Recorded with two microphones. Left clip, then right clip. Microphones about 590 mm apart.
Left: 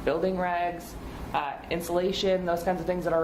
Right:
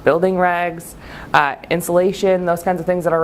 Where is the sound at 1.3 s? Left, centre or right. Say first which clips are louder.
Right 14 dB; right.